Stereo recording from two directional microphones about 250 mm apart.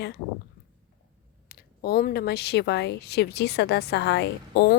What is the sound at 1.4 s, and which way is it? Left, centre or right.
A woman's voice, left.